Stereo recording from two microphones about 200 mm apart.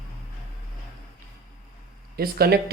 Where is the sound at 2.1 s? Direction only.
50° right (ahead or behind).